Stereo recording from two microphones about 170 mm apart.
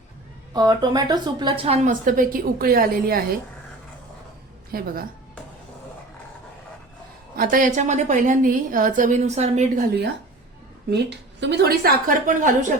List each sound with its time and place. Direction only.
0.5 s a woman's voice: 25° right (ahead or behind); by 3.2 s 60° right (ahead or behind)
4.7 s a woman's voice: 60° right (ahead or behind)
7.3 s a woman's voice: 55° right (ahead or behind)
10.9 s a woman's voice: 85° right; by 12.7 s 50° right (ahead or behind)